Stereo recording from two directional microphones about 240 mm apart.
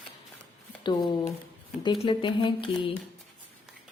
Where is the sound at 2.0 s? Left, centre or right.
Centre.